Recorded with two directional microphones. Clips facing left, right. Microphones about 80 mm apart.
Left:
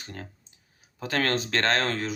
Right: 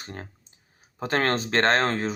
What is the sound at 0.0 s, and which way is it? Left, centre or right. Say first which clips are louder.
Speech: right 2 dB; right.